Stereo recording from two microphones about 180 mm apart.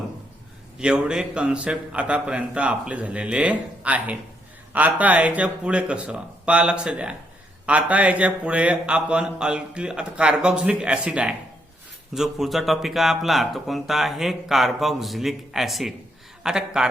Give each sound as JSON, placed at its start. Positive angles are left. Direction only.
{"t": 0.8, "sound": "a man's voice", "side_deg": -5}